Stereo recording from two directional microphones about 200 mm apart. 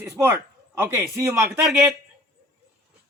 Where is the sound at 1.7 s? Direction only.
Centre (ahead or behind).